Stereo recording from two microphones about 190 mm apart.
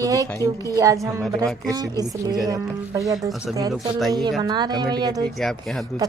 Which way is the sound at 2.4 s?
20° right (ahead or behind).